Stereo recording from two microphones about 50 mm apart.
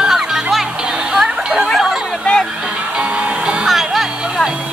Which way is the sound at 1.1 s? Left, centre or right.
Centre.